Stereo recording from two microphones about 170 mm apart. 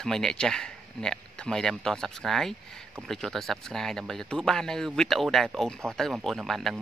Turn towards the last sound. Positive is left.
turn(degrees=0)  # may be behind; listen again after turning